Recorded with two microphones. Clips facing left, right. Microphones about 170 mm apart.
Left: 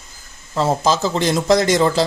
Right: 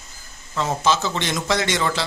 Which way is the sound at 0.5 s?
35° left (ahead or behind).